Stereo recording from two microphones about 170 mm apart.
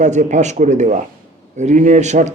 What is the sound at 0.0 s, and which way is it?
A man's voice, 45° right (ahead or behind).